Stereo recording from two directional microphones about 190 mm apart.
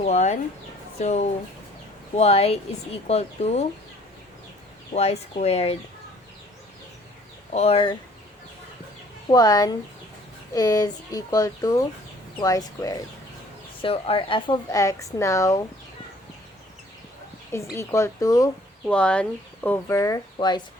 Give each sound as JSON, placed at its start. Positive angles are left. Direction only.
{"t": 0.0, "sound": "speech", "side_deg": 40}
{"t": 4.9, "sound": "speech", "side_deg": 35}
{"t": 7.5, "sound": "speech", "side_deg": 35}
{"t": 9.3, "sound": "speech", "side_deg": 20}
{"t": 13.8, "sound": "a woman's voice", "side_deg": 30}
{"t": 17.7, "sound": "a woman's voice", "side_deg": 15}
{"t": 18.9, "sound": "a woman's voice", "side_deg": 5}